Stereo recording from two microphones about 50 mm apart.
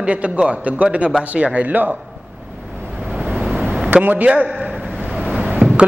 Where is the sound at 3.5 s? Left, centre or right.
Centre.